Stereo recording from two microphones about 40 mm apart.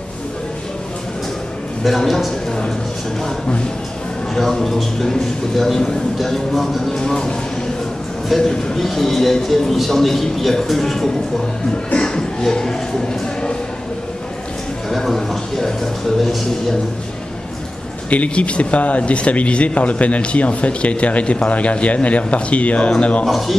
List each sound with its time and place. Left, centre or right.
1.9 s a man's voice: centre
4.4 s a man's voice: centre
8.4 s a man's voice: centre
12.0 s music: centre
14.9 s a man's voice: centre
18.1 s speech: left
23.2 s a man's voice: centre